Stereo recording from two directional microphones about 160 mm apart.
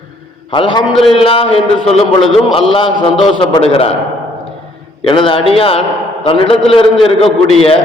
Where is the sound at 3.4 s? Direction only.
30° left (ahead or behind).